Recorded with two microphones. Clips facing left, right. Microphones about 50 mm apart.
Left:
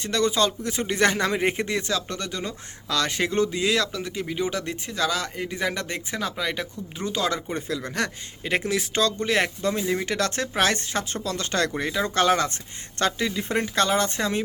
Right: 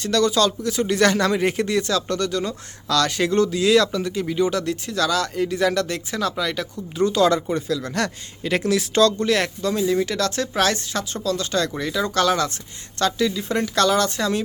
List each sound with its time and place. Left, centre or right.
0.0 s speech: left
3.7 s speech: centre
7.5 s speech: left
11.8 s speech: left